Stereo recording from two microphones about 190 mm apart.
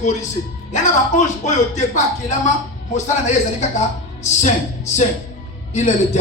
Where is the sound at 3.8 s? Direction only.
40° left (ahead or behind).